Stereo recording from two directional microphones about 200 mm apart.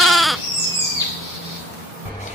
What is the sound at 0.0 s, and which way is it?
Goat, centre (ahead or behind).